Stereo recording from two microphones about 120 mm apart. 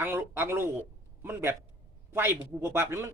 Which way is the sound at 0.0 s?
20° right (ahead or behind).